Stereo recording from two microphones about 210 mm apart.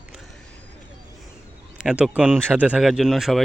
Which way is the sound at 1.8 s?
5° right (ahead or behind).